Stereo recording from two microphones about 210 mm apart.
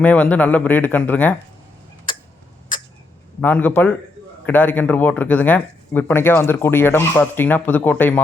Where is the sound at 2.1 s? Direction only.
25° left (ahead or behind).